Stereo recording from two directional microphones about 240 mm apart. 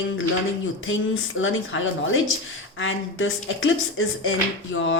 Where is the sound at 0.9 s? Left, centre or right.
Left.